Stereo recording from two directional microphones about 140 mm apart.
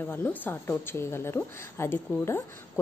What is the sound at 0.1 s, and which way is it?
Speech, 15° left (ahead or behind).